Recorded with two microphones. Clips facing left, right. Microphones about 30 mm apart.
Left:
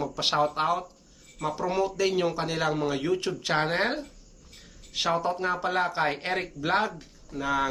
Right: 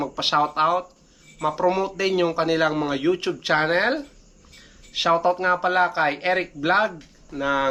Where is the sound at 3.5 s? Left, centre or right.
Centre.